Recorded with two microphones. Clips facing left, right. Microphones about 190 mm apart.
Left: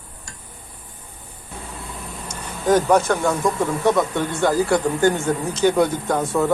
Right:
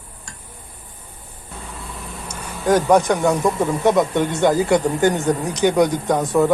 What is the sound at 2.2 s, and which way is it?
Speech, 10° right (ahead or behind).